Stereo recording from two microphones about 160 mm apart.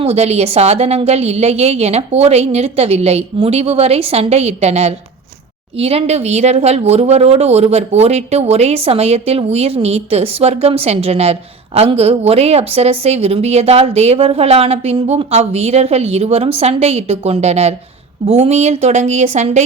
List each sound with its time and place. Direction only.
0.0 s a woman's voice: 40° right (ahead or behind)